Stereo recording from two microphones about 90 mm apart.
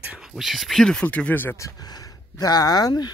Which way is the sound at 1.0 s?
15° left (ahead or behind).